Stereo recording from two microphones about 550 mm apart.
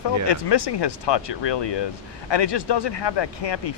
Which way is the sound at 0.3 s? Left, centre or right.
Left.